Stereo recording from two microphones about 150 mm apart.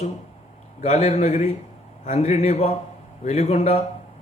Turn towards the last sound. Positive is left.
turn(degrees=45)  # may be behind; listen again after turning